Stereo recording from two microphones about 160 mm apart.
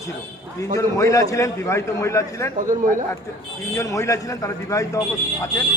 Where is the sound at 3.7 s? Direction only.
20° left (ahead or behind).